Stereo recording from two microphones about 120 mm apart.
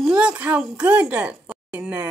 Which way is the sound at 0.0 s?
5° right (ahead or behind).